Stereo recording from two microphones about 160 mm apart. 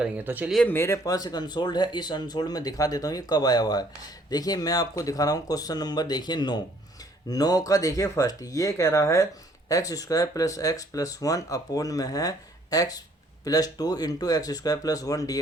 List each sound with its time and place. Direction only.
0.0 s speech: 5° right (ahead or behind)
0.5 s speech: 10° left (ahead or behind)